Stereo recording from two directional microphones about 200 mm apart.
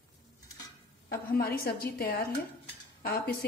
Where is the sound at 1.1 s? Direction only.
50° left (ahead or behind).